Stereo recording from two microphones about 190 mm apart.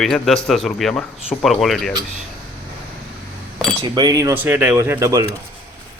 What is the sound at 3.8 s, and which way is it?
Speech, 25° right (ahead or behind).